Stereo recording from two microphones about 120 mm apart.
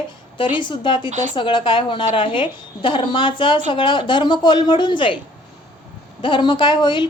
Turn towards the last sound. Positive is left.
turn(degrees=40)  # may be behind; listen again after turning